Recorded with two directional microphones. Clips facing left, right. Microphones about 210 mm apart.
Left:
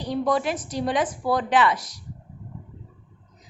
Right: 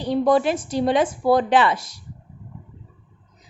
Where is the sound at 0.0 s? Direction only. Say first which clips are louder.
Right 5 dB; 30° right (ahead or behind).